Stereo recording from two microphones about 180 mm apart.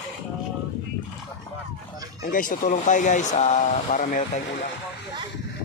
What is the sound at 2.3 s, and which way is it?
Speech, 50° left (ahead or behind).